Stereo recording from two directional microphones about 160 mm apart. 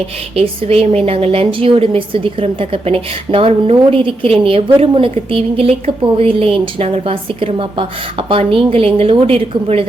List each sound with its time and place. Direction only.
0.3 s a woman's voice: 40° right (ahead or behind)